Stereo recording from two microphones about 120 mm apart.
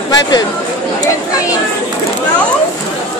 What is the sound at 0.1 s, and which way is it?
Speech, 35° left (ahead or behind).